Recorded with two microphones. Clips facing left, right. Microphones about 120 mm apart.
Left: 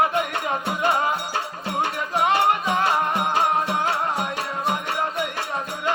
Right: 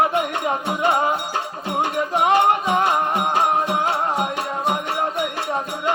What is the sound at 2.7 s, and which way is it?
Music, 20° right (ahead or behind).